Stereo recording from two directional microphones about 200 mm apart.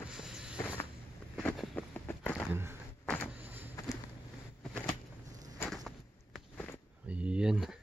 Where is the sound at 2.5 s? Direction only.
10° right (ahead or behind).